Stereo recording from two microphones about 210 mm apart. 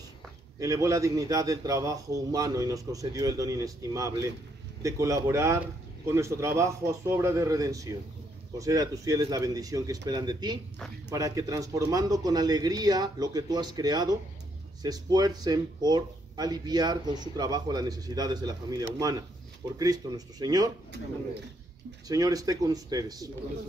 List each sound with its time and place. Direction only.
0.6 s a man's voice: 15° right (ahead or behind)
22.0 s a man's voice: 15° right (ahead or behind)